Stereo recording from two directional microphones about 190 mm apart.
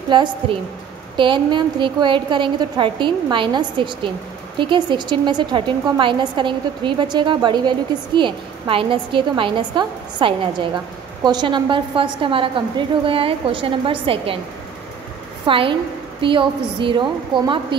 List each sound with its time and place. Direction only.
0.1 s a woman's voice: 25° right (ahead or behind)
15.4 s a woman's voice: 30° right (ahead or behind)